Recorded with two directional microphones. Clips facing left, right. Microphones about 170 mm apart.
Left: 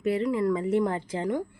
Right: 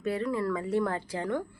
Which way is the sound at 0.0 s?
20° left (ahead or behind).